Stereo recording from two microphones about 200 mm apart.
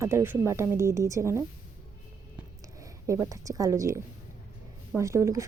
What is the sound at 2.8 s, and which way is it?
A woman's voice, 15° right (ahead or behind).